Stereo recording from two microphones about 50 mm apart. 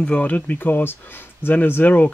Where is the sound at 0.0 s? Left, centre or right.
Left.